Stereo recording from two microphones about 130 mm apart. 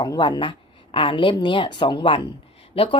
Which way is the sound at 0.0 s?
35° left (ahead or behind).